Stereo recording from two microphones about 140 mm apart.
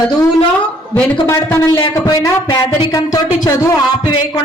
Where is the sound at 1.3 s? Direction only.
15° left (ahead or behind).